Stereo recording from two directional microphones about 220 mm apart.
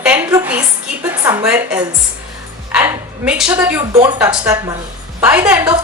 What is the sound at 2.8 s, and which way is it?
A woman's voice, 5° right (ahead or behind).